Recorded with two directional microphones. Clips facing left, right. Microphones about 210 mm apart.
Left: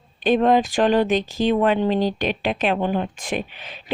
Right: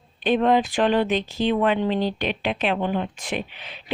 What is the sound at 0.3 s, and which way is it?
Speech, 40° left (ahead or behind).